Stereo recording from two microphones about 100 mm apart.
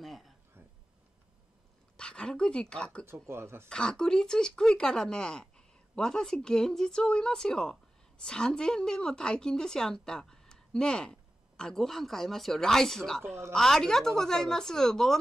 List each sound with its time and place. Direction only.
0.0 s a sound: centre (ahead or behind)
2.0 s speech: 10° left (ahead or behind)
3.1 s speech: 25° right (ahead or behind)
3.6 s a woman's voice: 10° left (ahead or behind)